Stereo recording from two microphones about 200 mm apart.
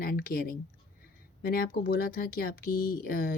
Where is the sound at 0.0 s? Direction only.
50° left (ahead or behind).